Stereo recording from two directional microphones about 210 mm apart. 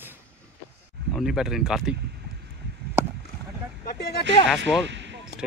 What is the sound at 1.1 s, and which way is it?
Speech, centre (ahead or behind).